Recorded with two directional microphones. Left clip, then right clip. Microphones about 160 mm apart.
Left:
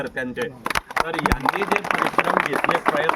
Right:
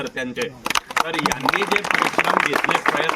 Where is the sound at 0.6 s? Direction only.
30° left (ahead or behind).